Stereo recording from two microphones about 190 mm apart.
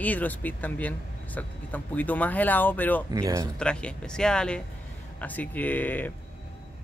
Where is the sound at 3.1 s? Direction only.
15° right (ahead or behind).